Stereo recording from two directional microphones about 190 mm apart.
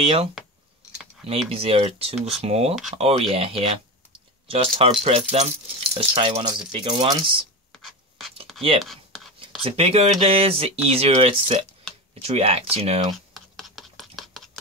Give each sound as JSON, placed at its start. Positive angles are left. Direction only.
{"t": 0.0, "sound": "speech", "side_deg": -30}
{"t": 1.5, "sound": "speech", "side_deg": -30}
{"t": 8.8, "sound": "writing", "side_deg": 0}
{"t": 9.6, "sound": "speech", "side_deg": -30}
{"t": 13.3, "sound": "computer keyboard", "side_deg": 0}